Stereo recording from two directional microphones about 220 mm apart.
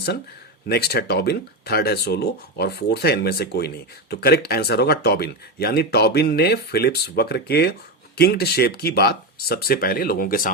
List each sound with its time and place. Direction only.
0.7 s speech: 45° left (ahead or behind)